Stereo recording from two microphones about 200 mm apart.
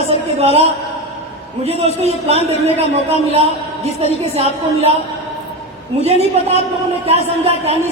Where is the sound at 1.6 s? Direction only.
30° right (ahead or behind).